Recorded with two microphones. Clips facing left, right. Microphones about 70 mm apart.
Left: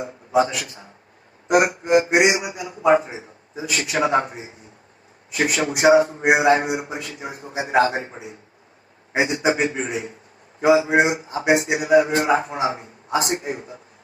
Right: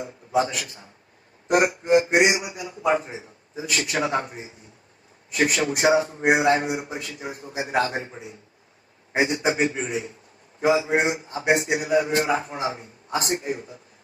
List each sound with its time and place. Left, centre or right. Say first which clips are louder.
0.3 s a man's voice: left 4 dB; left